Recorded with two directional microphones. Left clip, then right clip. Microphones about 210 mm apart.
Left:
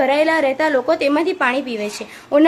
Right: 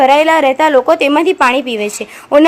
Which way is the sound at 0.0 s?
30° right (ahead or behind).